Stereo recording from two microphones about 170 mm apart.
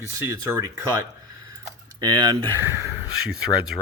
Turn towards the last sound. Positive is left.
turn(degrees=-5)  # may be behind; listen again after turning